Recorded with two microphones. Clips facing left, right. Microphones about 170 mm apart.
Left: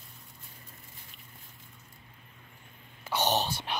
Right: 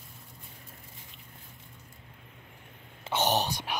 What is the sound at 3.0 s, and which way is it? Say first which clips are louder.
Wail: right 1 dB; 20° right (ahead or behind).